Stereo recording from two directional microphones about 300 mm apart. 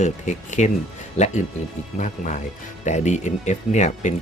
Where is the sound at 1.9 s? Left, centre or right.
Left.